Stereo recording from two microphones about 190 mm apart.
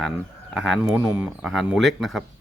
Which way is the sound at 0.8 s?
15° right (ahead or behind).